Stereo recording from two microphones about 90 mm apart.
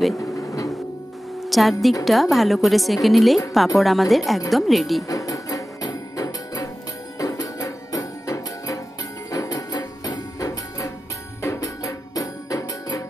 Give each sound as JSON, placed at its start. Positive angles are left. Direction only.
{"t": 0.2, "sound": "vehicle", "side_deg": 40}
{"t": 1.4, "sound": "a woman's voice", "side_deg": 0}
{"t": 5.0, "sound": "music", "side_deg": 40}
{"t": 11.4, "sound": "music", "side_deg": 30}